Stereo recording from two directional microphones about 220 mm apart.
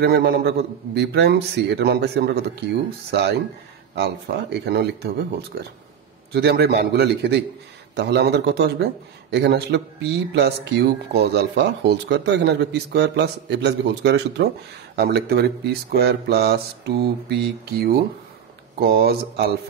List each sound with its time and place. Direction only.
0.0 s speech: 50° right (ahead or behind)